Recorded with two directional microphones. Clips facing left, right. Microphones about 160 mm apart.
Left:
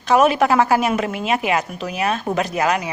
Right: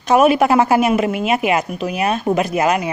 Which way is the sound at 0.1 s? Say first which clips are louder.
Right 3 dB; 15° right (ahead or behind).